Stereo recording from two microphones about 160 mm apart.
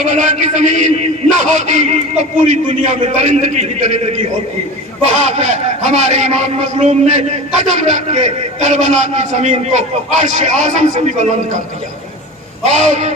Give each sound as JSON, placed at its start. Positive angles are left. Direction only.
{"t": 0.0, "sound": "a man's voice", "side_deg": -50}
{"t": 5.2, "sound": "a man's voice", "side_deg": -45}
{"t": 12.6, "sound": "a man's voice", "side_deg": -45}